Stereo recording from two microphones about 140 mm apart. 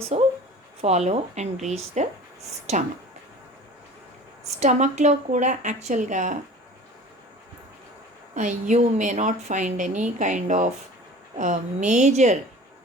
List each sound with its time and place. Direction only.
0.1 s a woman's voice: 50° right (ahead or behind)
4.6 s a woman's voice: 55° right (ahead or behind)
8.4 s a woman's voice: 60° right (ahead or behind)